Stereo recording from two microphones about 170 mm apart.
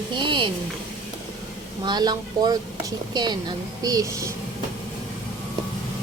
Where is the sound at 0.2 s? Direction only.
30° right (ahead or behind).